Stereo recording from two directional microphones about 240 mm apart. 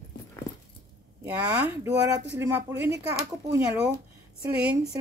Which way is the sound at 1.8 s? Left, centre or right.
Centre.